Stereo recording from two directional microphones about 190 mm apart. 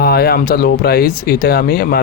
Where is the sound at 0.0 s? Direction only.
55° left (ahead or behind).